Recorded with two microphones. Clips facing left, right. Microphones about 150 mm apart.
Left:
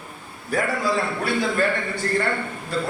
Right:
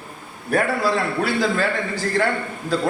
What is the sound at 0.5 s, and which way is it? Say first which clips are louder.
Speech: right 4 dB; 60° right (ahead or behind).